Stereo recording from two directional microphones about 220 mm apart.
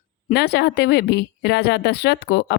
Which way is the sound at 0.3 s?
50° left (ahead or behind).